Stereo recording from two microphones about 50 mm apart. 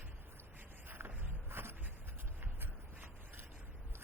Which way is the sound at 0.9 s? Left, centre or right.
Right.